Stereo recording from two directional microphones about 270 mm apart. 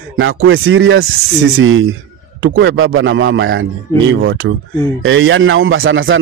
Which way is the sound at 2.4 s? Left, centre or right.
Right.